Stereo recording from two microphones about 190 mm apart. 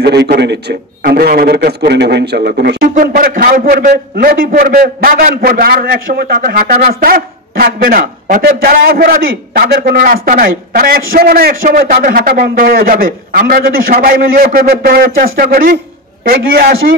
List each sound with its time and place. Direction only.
0.0 s a man's voice: 60° right (ahead or behind)